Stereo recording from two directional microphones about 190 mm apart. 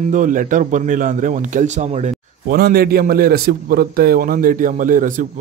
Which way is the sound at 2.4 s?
55° right (ahead or behind).